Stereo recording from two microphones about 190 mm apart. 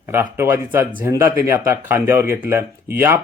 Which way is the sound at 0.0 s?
10° right (ahead or behind).